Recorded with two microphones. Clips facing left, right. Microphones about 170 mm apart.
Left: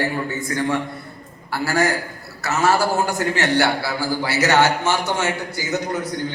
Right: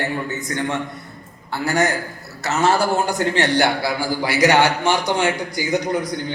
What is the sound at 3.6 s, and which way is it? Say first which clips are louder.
A man's voice: right 1 dB; 15° right (ahead or behind).